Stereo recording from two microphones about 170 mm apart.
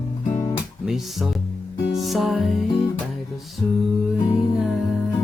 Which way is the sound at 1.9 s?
Centre (ahead or behind).